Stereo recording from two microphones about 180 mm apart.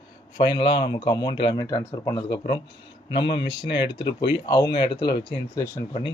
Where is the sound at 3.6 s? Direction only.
25° left (ahead or behind).